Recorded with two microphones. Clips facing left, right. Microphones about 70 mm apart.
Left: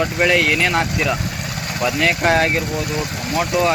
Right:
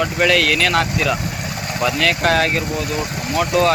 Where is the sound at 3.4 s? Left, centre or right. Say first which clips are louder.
Right 2 dB; centre.